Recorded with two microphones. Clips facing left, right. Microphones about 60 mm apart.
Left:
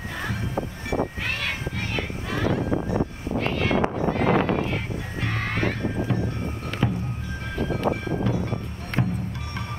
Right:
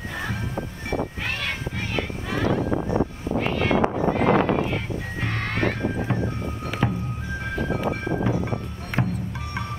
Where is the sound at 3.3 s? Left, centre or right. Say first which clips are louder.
Right 1 dB; centre.